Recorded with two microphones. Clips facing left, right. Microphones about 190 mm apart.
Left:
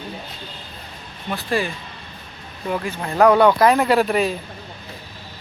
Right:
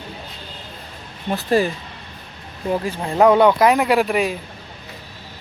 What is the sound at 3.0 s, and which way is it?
Speech, 20° right (ahead or behind).